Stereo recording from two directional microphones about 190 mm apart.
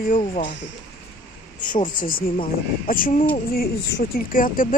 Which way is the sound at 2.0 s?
50° left (ahead or behind).